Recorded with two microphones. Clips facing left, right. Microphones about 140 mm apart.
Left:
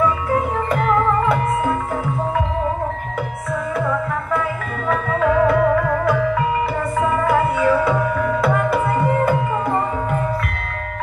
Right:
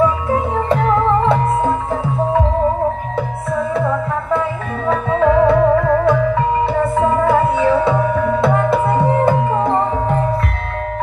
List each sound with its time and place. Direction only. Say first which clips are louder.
0.0 s music: right 3 dB; 25° right (ahead or behind)
4.8 s music: right 4 dB; 25° right (ahead or behind)